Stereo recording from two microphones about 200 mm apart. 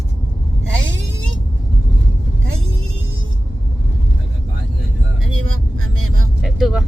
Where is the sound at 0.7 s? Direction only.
70° right (ahead or behind).